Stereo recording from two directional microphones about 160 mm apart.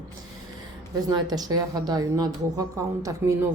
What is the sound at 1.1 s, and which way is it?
A woman's voice, 25° right (ahead or behind).